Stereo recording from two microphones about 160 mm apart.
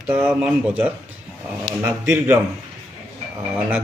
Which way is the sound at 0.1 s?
10° right (ahead or behind).